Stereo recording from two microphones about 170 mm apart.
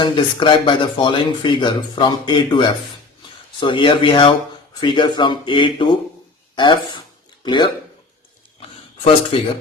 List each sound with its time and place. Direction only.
0.0 s speech: 30° left (ahead or behind)
9.3 s speech: 30° left (ahead or behind)